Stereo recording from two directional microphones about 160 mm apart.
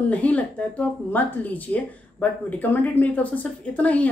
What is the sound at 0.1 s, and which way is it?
Speech, 10° left (ahead or behind).